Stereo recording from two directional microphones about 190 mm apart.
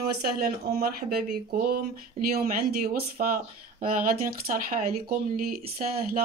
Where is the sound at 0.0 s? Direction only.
55° right (ahead or behind).